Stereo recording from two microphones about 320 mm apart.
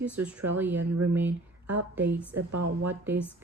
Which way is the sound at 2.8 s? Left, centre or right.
Centre.